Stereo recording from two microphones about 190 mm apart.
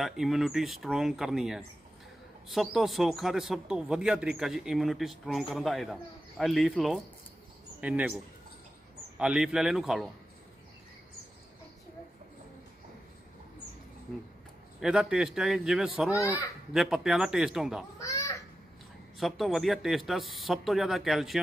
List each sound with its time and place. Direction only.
0.0 s speech: centre (ahead or behind)
9.2 s speech: 5° right (ahead or behind)
14.8 s speech: centre (ahead or behind)
17.9 s children playing: 15° left (ahead or behind)
19.1 s speech: centre (ahead or behind)